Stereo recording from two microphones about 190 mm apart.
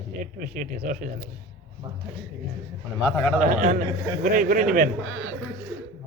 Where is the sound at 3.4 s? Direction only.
45° right (ahead or behind).